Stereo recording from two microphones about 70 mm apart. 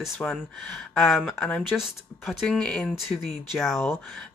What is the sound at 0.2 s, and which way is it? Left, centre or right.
Speech, centre.